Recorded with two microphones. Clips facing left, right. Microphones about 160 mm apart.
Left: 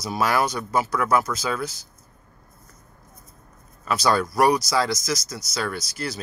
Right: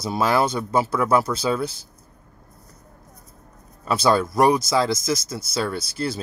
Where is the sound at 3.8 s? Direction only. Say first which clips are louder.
Right 2 dB; 25° right (ahead or behind).